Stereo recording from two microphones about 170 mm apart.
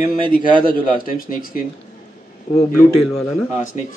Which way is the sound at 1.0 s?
55° left (ahead or behind).